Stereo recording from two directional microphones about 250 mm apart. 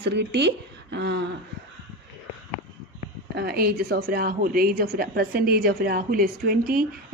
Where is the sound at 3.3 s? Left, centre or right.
Right.